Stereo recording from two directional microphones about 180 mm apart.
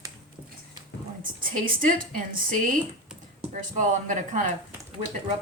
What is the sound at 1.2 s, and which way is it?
A woman's voice, 50° right (ahead or behind).